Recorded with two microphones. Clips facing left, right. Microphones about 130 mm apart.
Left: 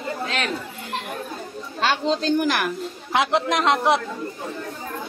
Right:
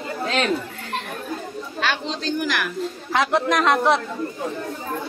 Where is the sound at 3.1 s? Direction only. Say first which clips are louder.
Even; 20° left (ahead or behind).